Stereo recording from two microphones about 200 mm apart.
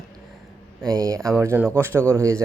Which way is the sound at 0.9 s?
15° right (ahead or behind).